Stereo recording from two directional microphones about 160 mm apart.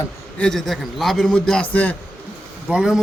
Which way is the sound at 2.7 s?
5° right (ahead or behind).